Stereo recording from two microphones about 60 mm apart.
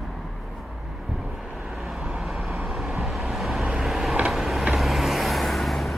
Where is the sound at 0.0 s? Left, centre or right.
Centre.